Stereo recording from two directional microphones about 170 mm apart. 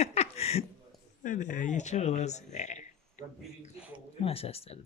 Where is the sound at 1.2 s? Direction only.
50° left (ahead or behind).